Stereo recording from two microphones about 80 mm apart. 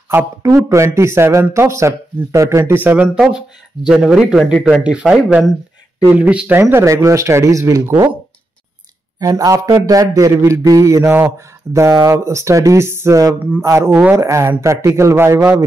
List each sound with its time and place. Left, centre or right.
0.4 s a man's voice: right
2.6 s speech: right
3.2 s a man's voice: centre
6.1 s speech: centre
6.6 s a man's voice: right
9.2 s a man's voice: right